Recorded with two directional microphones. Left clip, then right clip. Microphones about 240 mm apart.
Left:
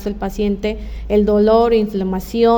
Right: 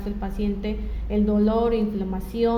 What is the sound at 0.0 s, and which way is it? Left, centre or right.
A woman's voice, left.